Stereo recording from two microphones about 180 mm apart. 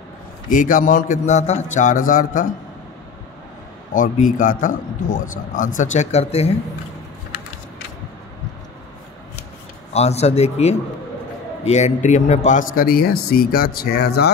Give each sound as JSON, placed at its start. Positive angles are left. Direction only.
{"t": 0.5, "sound": "a man's voice", "side_deg": 45}
{"t": 3.9, "sound": "a man's voice", "side_deg": 45}
{"t": 9.9, "sound": "a man's voice", "side_deg": 35}